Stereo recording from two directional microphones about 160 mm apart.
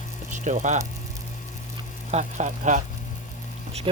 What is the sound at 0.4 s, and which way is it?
Speech, 50° right (ahead or behind).